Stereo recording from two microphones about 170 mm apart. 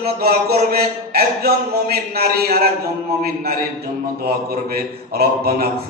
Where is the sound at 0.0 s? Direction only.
65° right (ahead or behind).